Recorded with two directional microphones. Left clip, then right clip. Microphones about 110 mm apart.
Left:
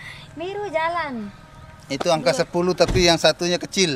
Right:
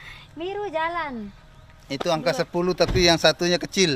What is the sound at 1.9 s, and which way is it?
Speech, 25° left (ahead or behind).